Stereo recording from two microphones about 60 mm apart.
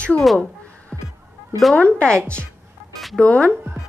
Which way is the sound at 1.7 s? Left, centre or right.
Centre.